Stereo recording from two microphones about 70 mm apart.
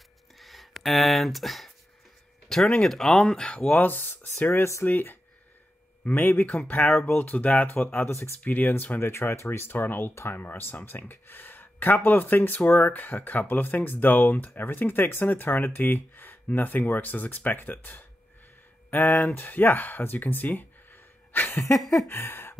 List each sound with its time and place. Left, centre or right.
0.4 s a sound: centre
2.5 s speech: centre; by 8.1 s left
8.1 s speech: left
8.5 s speech: left
9.1 s speech: left
22.0 s a sound: left